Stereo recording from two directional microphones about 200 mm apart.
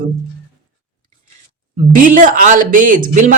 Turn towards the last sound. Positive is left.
turn(degrees=-40)  # may be behind; listen again after turning